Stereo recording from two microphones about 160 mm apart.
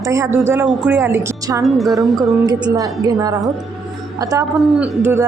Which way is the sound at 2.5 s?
25° right (ahead or behind).